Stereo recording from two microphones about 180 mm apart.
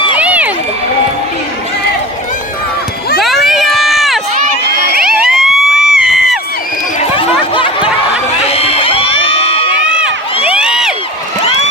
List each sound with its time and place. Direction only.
0.2 s crowd: 5° right (ahead or behind)
3.2 s run: centre (ahead or behind)
4.9 s crowd: centre (ahead or behind)
7.2 s a sound: 30° left (ahead or behind)
8.4 s crowd: 35° left (ahead or behind)
10.4 s crowd: 5° right (ahead or behind)